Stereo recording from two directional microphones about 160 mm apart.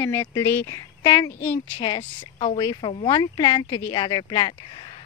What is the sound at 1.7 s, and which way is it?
Speech, 30° left (ahead or behind).